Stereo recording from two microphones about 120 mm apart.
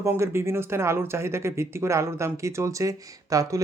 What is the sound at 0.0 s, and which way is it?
Speech, 20° right (ahead or behind).